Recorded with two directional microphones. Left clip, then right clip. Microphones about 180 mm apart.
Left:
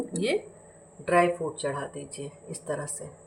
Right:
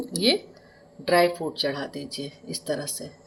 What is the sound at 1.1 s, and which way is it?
Speech, 45° right (ahead or behind).